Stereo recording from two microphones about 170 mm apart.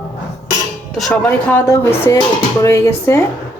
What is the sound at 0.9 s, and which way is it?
Speech, 5° left (ahead or behind).